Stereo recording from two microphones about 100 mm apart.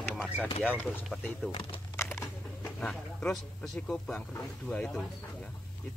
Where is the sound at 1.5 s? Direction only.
65° left (ahead or behind).